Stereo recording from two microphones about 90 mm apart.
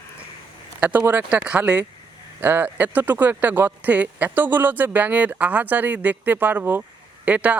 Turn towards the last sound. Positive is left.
turn(degrees=-15)  # may be behind; listen again after turning